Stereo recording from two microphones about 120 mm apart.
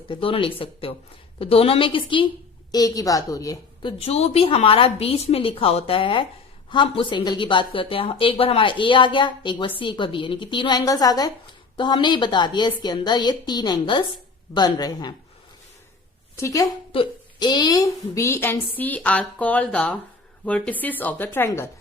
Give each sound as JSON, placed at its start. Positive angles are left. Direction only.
{"t": 0.1, "sound": "speech", "side_deg": 45}
{"t": 2.7, "sound": "a woman's voice", "side_deg": 30}
{"t": 3.8, "sound": "a woman's voice", "side_deg": 55}
{"t": 16.3, "sound": "a woman's voice", "side_deg": 25}
{"t": 16.9, "sound": "a woman's voice", "side_deg": 45}